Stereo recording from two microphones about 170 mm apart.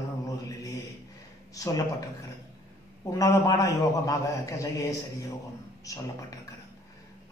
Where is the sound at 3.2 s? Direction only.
20° left (ahead or behind).